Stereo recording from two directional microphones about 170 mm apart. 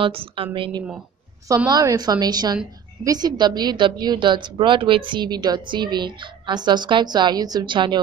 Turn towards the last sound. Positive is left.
turn(degrees=-25)  # may be behind; listen again after turning